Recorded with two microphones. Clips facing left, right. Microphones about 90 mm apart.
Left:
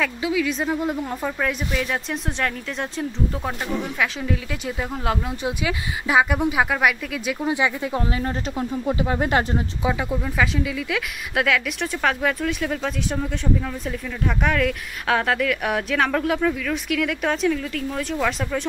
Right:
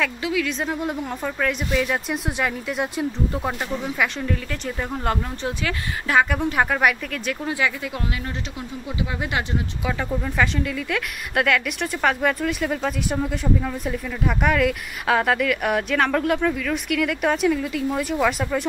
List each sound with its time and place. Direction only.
0.0 s speech: centre (ahead or behind)
7.4 s speech: 20° left (ahead or behind)
8.5 s speech: 45° left (ahead or behind)
9.8 s speech: 10° left (ahead or behind)